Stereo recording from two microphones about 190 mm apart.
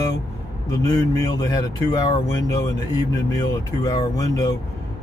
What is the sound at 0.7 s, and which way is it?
Speech, 20° left (ahead or behind).